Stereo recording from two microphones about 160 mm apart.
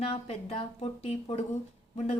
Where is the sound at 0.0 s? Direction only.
40° left (ahead or behind).